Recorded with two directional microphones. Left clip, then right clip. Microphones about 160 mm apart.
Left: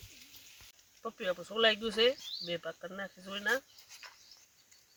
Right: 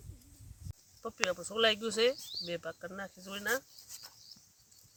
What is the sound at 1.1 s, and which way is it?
Speech, 10° right (ahead or behind).